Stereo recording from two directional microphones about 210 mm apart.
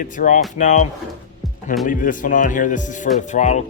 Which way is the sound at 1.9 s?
40° left (ahead or behind).